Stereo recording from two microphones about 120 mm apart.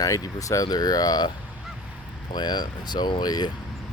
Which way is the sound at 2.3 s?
35° left (ahead or behind).